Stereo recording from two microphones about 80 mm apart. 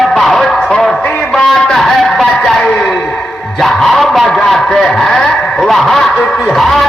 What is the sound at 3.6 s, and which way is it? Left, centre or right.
A man's voice, centre.